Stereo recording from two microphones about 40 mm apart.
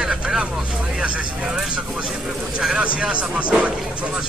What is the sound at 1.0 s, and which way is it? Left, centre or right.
Speech, right.